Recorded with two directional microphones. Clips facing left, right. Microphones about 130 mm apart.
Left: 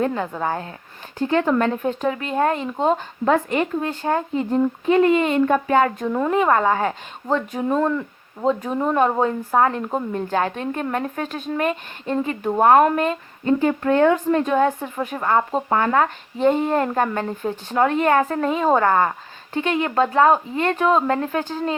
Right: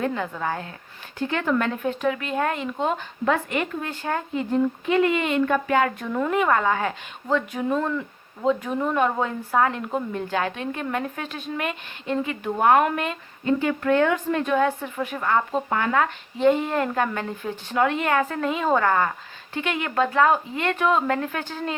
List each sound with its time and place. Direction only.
0.0 s a woman's voice: 35° left (ahead or behind)